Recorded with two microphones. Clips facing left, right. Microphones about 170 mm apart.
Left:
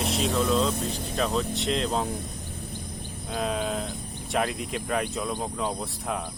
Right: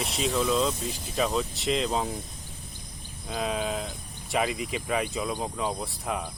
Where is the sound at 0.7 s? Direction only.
60° left (ahead or behind).